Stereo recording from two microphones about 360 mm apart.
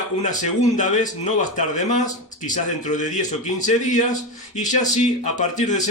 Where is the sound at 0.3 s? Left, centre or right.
Left.